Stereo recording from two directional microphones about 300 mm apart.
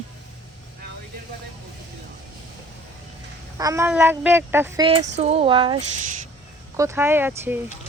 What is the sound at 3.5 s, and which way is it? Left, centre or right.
Speech, centre.